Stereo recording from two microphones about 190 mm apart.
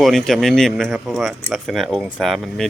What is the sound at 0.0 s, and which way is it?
Speech, centre (ahead or behind).